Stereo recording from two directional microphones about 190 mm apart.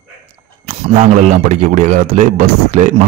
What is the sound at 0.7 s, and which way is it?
Speech, 40° right (ahead or behind).